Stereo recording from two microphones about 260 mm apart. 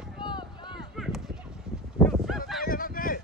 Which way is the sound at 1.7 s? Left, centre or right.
Centre.